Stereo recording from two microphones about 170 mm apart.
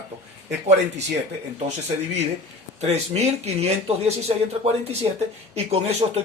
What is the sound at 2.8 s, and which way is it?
Speech, 40° right (ahead or behind).